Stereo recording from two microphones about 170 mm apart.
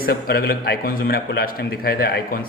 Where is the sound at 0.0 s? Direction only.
65° left (ahead or behind).